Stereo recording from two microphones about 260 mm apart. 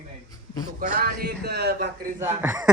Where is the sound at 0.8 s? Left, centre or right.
Right.